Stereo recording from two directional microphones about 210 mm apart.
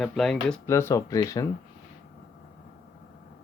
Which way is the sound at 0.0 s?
Centre (ahead or behind).